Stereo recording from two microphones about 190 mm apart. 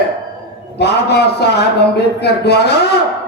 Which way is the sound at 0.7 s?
60° left (ahead or behind).